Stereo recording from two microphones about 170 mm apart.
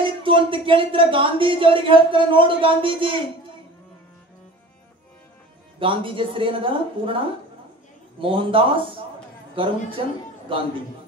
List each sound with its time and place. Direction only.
0.0 s speech: 30° right (ahead or behind)
5.8 s speech: 30° right (ahead or behind)